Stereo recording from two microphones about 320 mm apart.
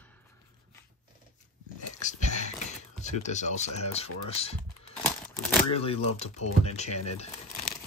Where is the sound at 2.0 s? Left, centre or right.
Left.